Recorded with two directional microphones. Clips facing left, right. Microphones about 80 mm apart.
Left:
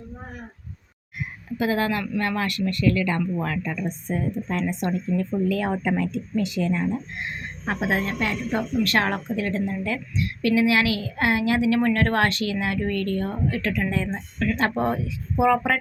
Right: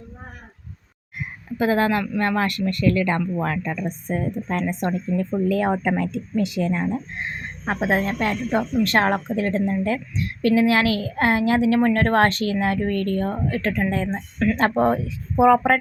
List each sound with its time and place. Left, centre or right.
1.2 s a woman's voice: right